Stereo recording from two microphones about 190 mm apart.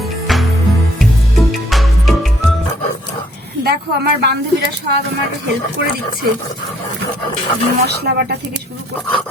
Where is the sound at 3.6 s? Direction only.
60° right (ahead or behind).